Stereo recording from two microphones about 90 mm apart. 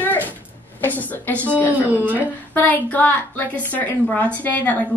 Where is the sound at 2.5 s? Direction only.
20° left (ahead or behind).